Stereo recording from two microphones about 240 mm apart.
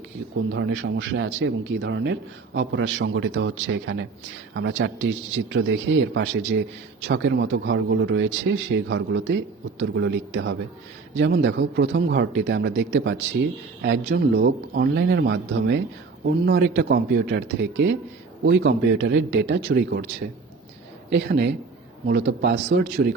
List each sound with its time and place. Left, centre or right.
0.5 s speech: right
21.1 s speech: right